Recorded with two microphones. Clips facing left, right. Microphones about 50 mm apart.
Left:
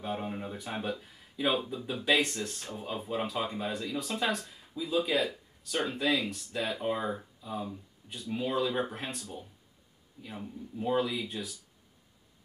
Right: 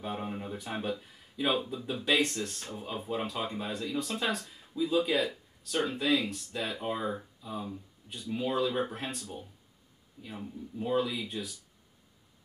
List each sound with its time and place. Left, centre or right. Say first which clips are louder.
0.0 s speech: left 1 dB; centre